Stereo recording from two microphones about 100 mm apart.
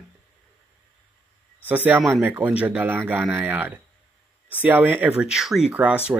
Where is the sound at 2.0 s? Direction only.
Centre (ahead or behind).